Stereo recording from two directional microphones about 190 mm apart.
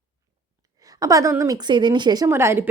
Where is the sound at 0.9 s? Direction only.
20° right (ahead or behind).